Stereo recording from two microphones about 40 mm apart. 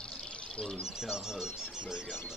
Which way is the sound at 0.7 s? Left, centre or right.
Centre.